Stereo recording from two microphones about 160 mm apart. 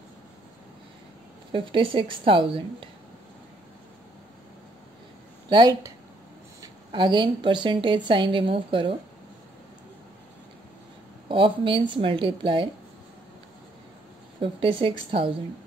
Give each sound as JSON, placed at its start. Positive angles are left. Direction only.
{"t": 1.5, "sound": "a woman's voice", "side_deg": -30}
{"t": 5.5, "sound": "a woman's voice", "side_deg": -25}
{"t": 11.2, "sound": "a woman's voice", "side_deg": -30}
{"t": 14.4, "sound": "a woman's voice", "side_deg": -35}